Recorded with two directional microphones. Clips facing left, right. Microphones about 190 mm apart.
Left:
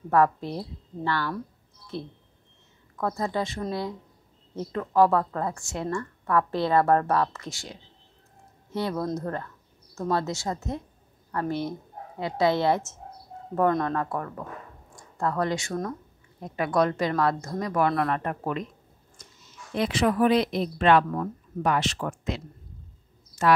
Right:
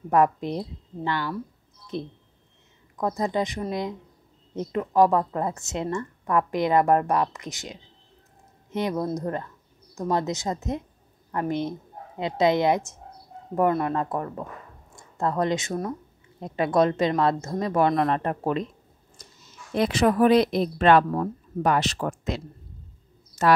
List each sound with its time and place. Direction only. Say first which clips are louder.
0.1 s a woman's voice: right 1 dB; 20° right (ahead or behind)
13.9 s a woman's voice: right 2 dB; 20° right (ahead or behind)
19.2 s a sound: right 2 dB; 35° right (ahead or behind)
19.7 s speech: right 3 dB; 40° right (ahead or behind)